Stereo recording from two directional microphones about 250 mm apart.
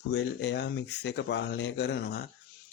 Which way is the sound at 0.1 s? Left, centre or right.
Left.